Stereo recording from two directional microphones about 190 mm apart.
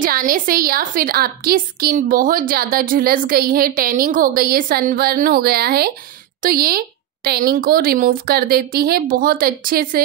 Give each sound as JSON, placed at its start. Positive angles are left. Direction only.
{"t": 0.0, "sound": "a woman's voice", "side_deg": -45}